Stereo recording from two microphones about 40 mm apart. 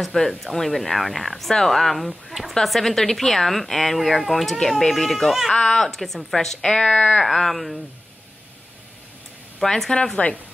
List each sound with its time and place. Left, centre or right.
0.0 s speech: centre
5.5 s a woman's voice: centre
6.6 s speech: centre
7.2 s speech: centre
9.6 s a woman's voice: centre
10.1 s speech: left